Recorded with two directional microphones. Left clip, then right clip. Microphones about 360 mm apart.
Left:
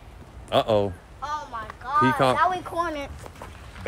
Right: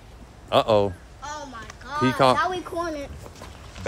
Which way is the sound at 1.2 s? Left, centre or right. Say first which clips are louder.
Left 4 dB; centre.